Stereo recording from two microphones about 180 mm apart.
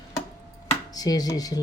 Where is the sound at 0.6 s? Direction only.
20° left (ahead or behind).